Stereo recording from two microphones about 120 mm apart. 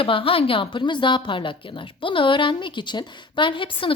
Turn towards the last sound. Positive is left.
turn(degrees=45)  # may be behind; listen again after turning